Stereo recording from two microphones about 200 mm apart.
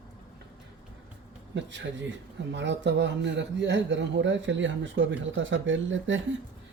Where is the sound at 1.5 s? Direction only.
65° right (ahead or behind).